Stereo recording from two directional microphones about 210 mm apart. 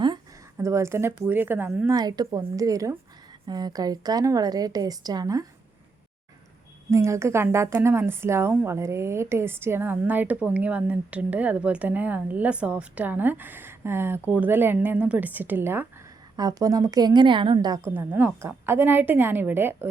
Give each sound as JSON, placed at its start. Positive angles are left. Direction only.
{"t": 0.5, "sound": "a woman's voice", "side_deg": -15}
{"t": 1.9, "sound": "a woman's voice", "side_deg": -20}
{"t": 6.9, "sound": "a woman's voice", "side_deg": -15}